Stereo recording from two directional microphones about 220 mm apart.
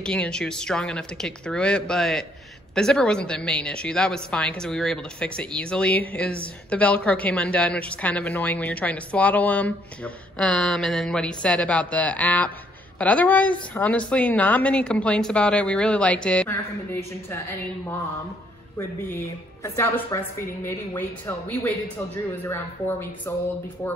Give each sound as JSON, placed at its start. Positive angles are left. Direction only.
{"t": 0.0, "sound": "a woman's voice", "side_deg": 5}
{"t": 18.8, "sound": "speech", "side_deg": 10}